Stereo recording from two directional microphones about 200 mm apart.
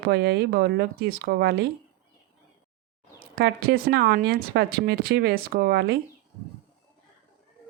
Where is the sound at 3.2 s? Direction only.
50° right (ahead or behind).